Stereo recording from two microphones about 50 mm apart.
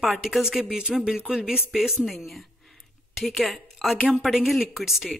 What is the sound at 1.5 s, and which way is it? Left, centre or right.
A woman's voice, centre.